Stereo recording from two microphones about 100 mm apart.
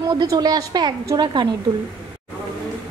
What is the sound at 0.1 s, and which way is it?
A woman's voice, 40° right (ahead or behind).